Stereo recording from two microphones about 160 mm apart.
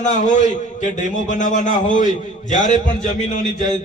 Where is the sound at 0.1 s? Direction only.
50° left (ahead or behind).